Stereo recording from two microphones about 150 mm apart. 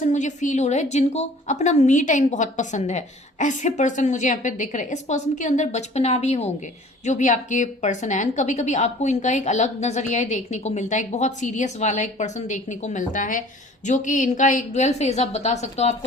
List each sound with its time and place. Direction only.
0.0 s a woman's voice: 55° left (ahead or behind)